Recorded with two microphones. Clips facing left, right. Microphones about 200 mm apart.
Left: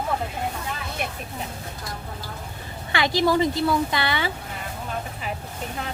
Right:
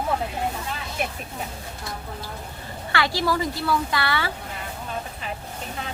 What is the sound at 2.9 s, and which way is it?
Speech, 20° left (ahead or behind).